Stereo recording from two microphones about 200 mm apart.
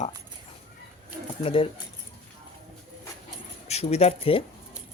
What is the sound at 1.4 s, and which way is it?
Speech, 30° left (ahead or behind).